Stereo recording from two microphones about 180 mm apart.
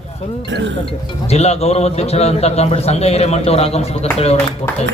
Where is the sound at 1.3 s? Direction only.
35° left (ahead or behind).